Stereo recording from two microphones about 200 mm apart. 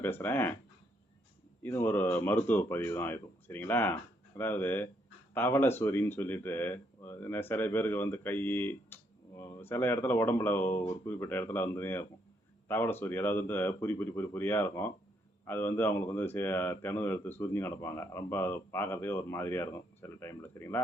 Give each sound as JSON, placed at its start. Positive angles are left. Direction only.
{"t": 0.0, "sound": "speech", "side_deg": 10}
{"t": 1.6, "sound": "speech", "side_deg": 10}